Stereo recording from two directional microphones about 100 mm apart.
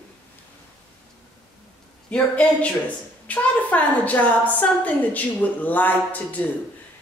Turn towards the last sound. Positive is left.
turn(degrees=15)  # may be behind; listen again after turning